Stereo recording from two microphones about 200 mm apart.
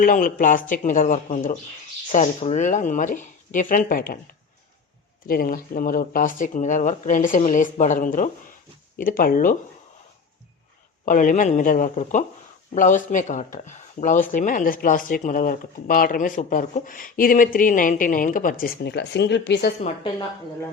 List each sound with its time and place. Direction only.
0.0 s speech: 45° left (ahead or behind)
5.2 s speech: 45° left (ahead or behind)
11.0 s speech: 40° left (ahead or behind); by 19.7 s 60° left (ahead or behind)